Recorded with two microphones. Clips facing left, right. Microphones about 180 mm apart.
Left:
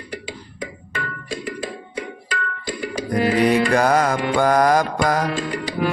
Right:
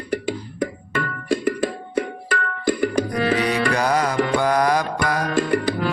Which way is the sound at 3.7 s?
50° left (ahead or behind).